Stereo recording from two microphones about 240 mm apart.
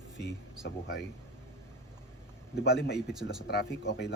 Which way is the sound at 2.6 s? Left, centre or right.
Left.